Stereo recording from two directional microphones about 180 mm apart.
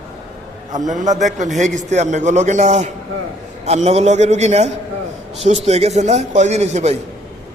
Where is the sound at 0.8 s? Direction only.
45° right (ahead or behind).